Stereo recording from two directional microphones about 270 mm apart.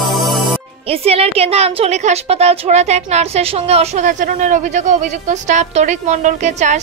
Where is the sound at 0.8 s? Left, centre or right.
Right.